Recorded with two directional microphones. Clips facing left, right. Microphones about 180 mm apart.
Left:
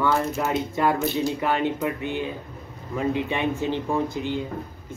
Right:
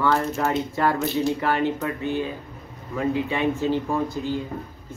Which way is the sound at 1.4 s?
20° left (ahead or behind).